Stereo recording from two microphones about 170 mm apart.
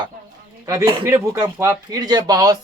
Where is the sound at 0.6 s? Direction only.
20° right (ahead or behind).